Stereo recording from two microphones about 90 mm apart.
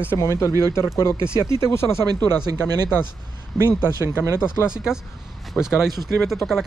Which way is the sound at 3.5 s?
Centre (ahead or behind).